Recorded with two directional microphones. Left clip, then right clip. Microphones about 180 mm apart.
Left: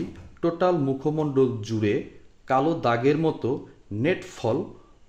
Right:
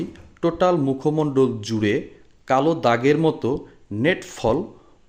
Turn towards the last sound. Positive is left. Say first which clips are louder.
# right 5 dB
turn(degrees=-25)  # may be behind; listen again after turning